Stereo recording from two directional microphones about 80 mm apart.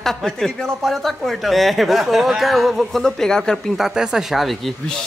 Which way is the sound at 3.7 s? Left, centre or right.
Centre.